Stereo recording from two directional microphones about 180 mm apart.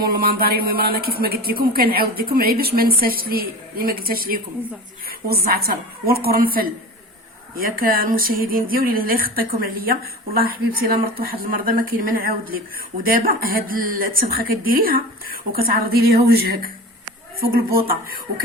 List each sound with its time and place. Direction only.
0.0 s speech: 55° right (ahead or behind)